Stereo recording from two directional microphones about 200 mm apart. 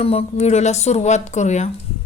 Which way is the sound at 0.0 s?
30° left (ahead or behind).